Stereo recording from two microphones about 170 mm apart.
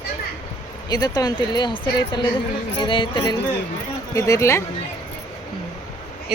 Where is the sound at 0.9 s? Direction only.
25° left (ahead or behind).